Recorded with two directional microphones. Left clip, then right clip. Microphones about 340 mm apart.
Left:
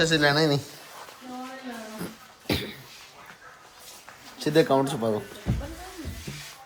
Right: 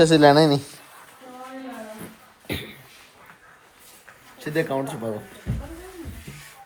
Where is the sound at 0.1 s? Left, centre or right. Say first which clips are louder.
Right 7 dB; centre.